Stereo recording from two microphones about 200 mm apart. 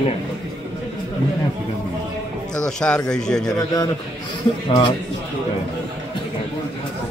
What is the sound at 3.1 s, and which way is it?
Speech, 5° left (ahead or behind).